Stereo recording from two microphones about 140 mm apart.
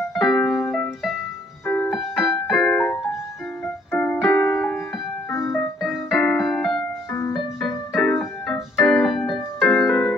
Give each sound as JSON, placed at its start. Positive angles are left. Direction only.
{"t": 0.1, "sound": "music", "side_deg": 5}
{"t": 1.7, "sound": "keyboard", "side_deg": 15}
{"t": 7.1, "sound": "music", "side_deg": 15}
{"t": 7.9, "sound": "keyboard", "side_deg": 5}